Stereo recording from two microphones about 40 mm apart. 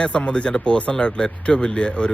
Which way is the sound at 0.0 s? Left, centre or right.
Left.